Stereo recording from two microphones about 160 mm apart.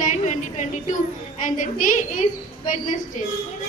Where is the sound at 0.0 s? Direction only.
50° left (ahead or behind).